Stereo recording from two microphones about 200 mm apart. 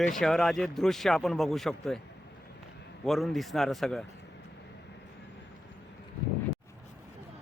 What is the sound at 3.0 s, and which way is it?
Speech, centre (ahead or behind).